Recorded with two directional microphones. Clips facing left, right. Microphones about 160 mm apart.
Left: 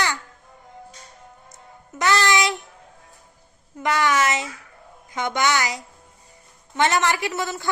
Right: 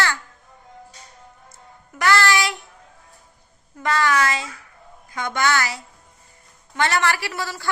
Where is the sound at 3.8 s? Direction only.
20° left (ahead or behind).